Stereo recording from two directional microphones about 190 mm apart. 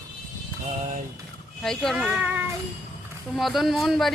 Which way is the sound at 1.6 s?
Centre (ahead or behind).